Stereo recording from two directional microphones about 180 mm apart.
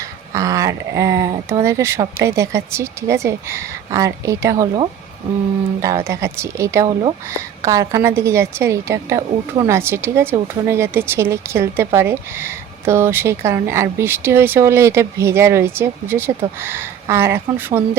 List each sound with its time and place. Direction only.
0.3 s a woman's voice: 20° right (ahead or behind)
6.1 s a woman's voice: 15° right (ahead or behind)